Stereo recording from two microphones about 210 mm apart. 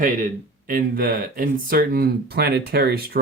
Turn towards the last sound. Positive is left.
turn(degrees=-50)  # may be behind; listen again after turning